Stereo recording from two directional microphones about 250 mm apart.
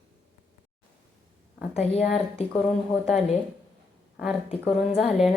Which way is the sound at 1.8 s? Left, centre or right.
Left.